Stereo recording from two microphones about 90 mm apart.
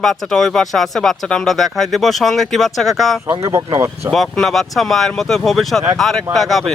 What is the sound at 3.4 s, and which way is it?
Speech, 35° right (ahead or behind).